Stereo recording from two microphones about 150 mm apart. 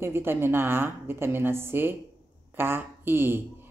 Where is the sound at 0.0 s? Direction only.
15° right (ahead or behind).